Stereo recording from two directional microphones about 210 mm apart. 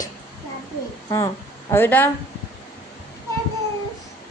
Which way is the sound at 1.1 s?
15° left (ahead or behind).